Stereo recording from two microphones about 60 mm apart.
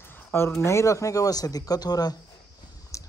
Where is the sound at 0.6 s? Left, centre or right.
Left.